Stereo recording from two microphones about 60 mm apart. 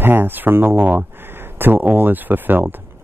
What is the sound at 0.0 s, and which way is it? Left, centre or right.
Speech, right.